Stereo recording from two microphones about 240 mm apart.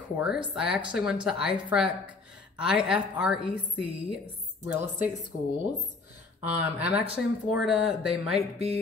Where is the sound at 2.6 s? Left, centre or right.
Centre.